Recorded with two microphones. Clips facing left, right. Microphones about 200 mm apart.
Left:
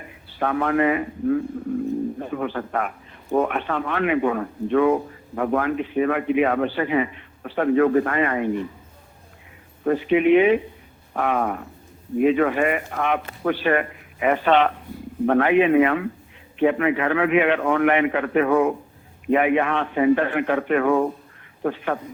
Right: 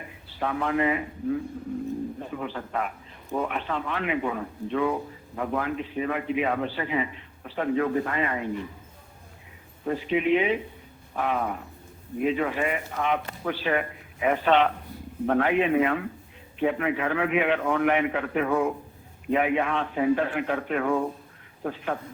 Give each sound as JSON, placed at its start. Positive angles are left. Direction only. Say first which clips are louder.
{"t": 0.3, "sound": "a man's voice", "louder": "left 5 dB", "side_deg": 60}
{"t": 9.8, "sound": "a man's voice", "louder": "left 7 dB", "side_deg": 65}